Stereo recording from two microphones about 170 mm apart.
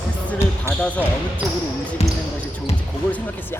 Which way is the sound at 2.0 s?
35° left (ahead or behind).